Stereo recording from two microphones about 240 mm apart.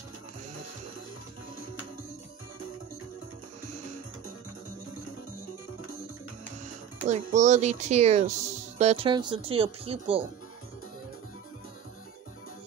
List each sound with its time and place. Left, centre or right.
7.1 s speech: right